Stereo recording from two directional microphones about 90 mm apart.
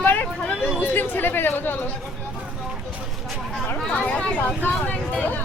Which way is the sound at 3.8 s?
15° left (ahead or behind).